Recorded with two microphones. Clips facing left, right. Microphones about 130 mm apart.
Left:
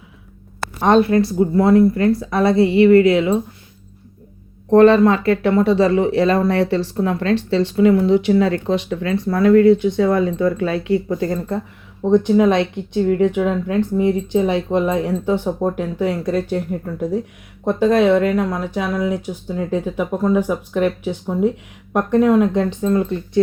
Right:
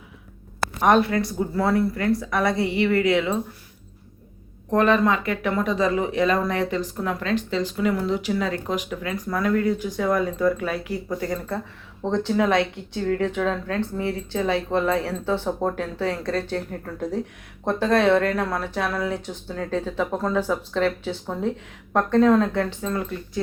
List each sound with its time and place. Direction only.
0.8 s speech: 25° left (ahead or behind)
2.6 s a woman's voice: 20° right (ahead or behind)
2.8 s speech: 25° left (ahead or behind)
4.7 s speech: 30° left (ahead or behind)